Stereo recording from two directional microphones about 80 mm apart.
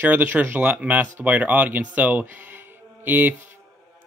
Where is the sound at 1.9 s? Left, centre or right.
Centre.